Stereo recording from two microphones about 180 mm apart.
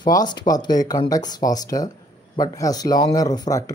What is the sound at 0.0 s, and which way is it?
Speech, 25° left (ahead or behind).